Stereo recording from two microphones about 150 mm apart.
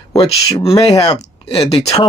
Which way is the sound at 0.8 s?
30° left (ahead or behind).